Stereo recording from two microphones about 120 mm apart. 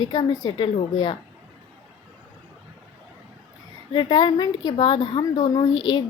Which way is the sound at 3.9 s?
40° left (ahead or behind).